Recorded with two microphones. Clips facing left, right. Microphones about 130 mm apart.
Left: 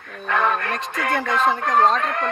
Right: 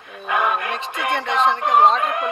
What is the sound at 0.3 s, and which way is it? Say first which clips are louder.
Speech: even; 15° right (ahead or behind).